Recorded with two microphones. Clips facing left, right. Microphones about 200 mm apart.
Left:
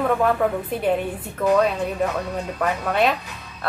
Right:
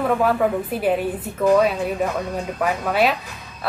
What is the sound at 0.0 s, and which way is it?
A woman's voice, 5° right (ahead or behind).